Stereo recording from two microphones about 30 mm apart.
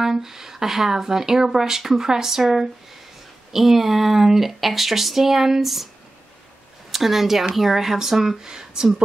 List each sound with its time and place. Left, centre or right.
0.0 s speech: centre
6.9 s speech: centre